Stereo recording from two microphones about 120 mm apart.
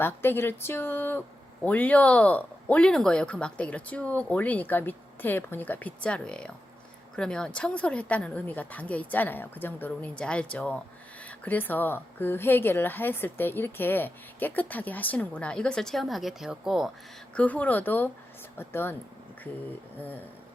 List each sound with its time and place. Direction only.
0.0 s a woman's voice: 20° left (ahead or behind); by 16.9 s 5° right (ahead or behind)
17.3 s a woman's voice: 10° left (ahead or behind)
20.0 s a woman's voice: 15° left (ahead or behind)